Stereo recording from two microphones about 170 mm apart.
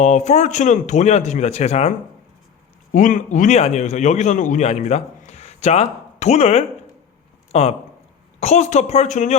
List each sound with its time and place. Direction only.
0.0 s a man's voice: 45° left (ahead or behind)
2.9 s a man's voice: 50° left (ahead or behind)